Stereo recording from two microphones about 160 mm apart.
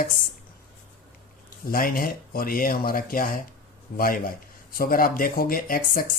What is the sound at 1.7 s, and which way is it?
Speech, 65° left (ahead or behind).